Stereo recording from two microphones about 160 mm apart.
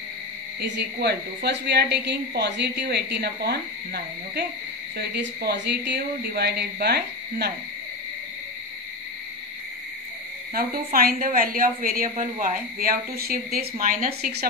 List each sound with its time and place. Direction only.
0.6 s a woman's voice: 90° right
10.5 s a woman's voice: 65° right (ahead or behind)